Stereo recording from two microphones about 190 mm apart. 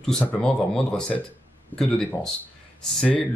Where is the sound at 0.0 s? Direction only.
5° left (ahead or behind).